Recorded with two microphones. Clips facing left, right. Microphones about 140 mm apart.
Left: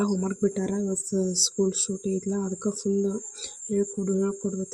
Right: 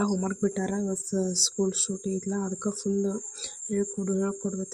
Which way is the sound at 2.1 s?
15° left (ahead or behind).